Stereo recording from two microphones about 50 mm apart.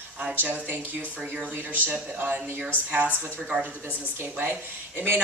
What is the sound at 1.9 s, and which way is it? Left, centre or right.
A woman's voice, right.